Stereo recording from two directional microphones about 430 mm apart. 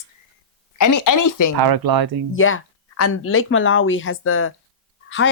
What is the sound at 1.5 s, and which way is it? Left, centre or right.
Speech, right.